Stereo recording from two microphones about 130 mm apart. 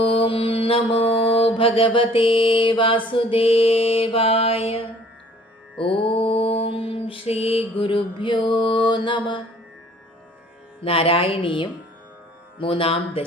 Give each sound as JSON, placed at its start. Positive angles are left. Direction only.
{"t": 0.0, "sound": "mantra", "side_deg": 45}
{"t": 6.1, "sound": "mantra", "side_deg": 45}
{"t": 10.8, "sound": "mantra", "side_deg": 45}